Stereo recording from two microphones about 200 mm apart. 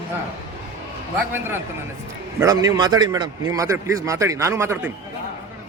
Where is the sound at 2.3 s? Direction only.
15° right (ahead or behind).